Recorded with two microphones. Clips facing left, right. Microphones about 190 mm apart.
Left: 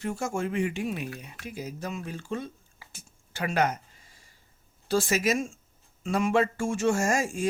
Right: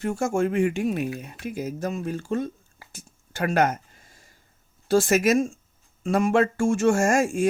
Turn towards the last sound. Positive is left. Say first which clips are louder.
# right 6 dB
turn(degrees=-50)  # may be behind; listen again after turning